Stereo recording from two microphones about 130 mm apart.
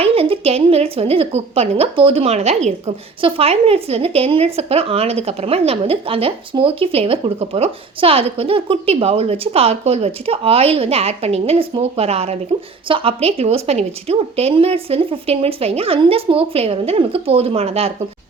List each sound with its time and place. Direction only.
0.0 s a woman's voice: 45° right (ahead or behind)
3.2 s a woman's voice: 45° right (ahead or behind)